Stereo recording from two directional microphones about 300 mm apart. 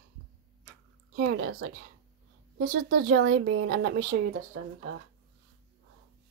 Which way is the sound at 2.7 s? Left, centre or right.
Right.